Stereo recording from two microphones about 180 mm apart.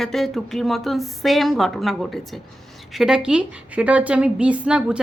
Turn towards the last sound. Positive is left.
turn(degrees=-5)  # may be behind; listen again after turning